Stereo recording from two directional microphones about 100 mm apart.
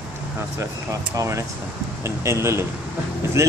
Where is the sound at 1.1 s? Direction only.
35° right (ahead or behind).